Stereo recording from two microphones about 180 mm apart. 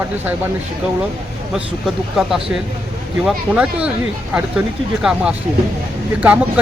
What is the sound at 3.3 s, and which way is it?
Speech, 5° right (ahead or behind).